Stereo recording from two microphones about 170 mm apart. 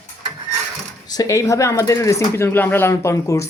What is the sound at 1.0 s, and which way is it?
A man's voice, 20° left (ahead or behind).